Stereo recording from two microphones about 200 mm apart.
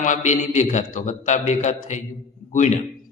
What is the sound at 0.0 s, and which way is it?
A man's voice, 40° left (ahead or behind).